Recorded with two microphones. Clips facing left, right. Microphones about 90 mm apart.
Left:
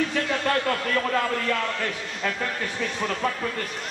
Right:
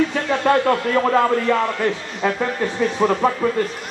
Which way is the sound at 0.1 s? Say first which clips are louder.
Right 7 dB; 30° right (ahead or behind).